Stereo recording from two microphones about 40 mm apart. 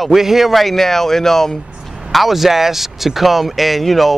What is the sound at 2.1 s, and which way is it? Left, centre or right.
Speech, centre.